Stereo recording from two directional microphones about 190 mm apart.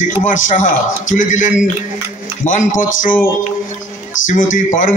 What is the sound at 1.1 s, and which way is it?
A man's voice, 40° left (ahead or behind).